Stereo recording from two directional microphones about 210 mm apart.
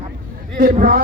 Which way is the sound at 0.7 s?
40° right (ahead or behind).